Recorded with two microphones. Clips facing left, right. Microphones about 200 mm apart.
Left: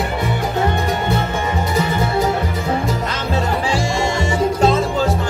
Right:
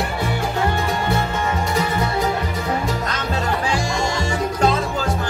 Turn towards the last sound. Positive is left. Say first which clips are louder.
# left 4 dB
turn(degrees=25)  # may be behind; listen again after turning